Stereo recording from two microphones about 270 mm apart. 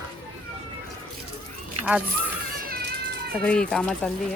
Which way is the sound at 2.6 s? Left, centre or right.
Right.